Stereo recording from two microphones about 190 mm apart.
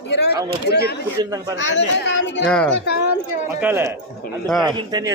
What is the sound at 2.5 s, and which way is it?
Speech, 5° left (ahead or behind).